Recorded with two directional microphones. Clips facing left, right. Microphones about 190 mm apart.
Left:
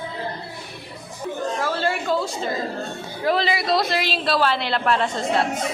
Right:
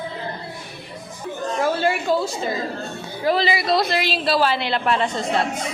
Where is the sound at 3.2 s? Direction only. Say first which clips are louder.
Right 1 dB; centre (ahead or behind).